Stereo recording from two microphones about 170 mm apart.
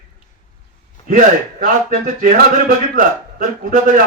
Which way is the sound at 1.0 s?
50° right (ahead or behind).